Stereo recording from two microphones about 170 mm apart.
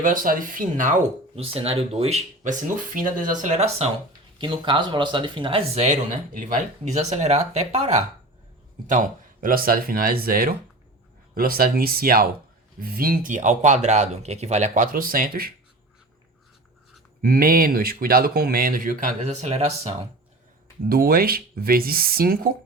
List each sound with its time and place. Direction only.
0.0 s speech: 55° right (ahead or behind)
4.4 s speech: 30° right (ahead or behind)
8.9 s speech: 50° right (ahead or behind)
17.2 s speech: 60° right (ahead or behind); by 20.0 s 40° right (ahead or behind)
20.9 s speech: 60° right (ahead or behind)